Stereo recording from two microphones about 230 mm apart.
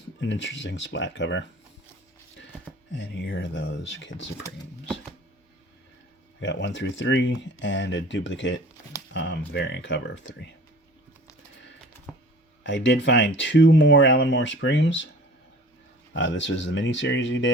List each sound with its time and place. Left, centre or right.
0.2 s speech: left
3.0 s speech: left
6.4 s speech: left
11.9 s music: centre
12.6 s speech: left
16.1 s speech: left